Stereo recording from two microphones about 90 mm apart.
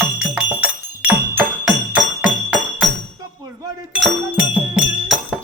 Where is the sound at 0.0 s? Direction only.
15° right (ahead or behind).